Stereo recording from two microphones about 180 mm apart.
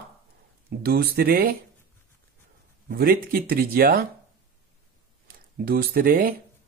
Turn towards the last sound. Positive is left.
turn(degrees=-50)  # may be behind; listen again after turning